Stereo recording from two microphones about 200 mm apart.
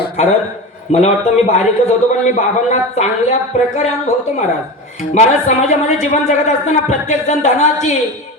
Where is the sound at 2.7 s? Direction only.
35° left (ahead or behind).